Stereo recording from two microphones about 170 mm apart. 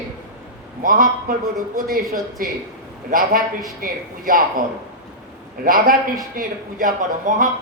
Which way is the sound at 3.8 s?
55° right (ahead or behind).